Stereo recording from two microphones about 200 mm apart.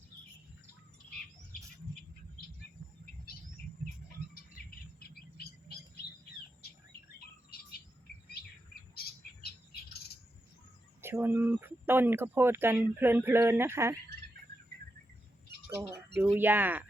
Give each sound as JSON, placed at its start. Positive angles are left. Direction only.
{"t": 4.5, "sound": "bird", "side_deg": 50}
{"t": 11.0, "sound": "speech", "side_deg": -10}
{"t": 15.5, "sound": "squawk", "side_deg": -55}
{"t": 16.2, "sound": "speech", "side_deg": -10}